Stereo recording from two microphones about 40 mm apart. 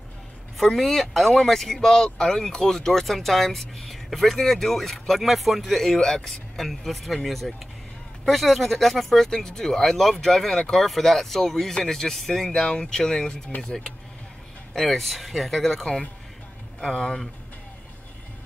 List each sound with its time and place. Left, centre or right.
0.6 s speech: centre
5.9 s speech: centre
6.5 s speech: centre